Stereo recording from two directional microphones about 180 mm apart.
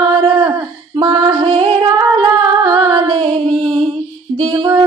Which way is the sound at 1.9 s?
20° right (ahead or behind).